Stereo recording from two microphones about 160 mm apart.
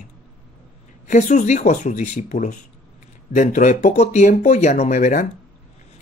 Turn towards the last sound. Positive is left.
turn(degrees=50)  # may be behind; listen again after turning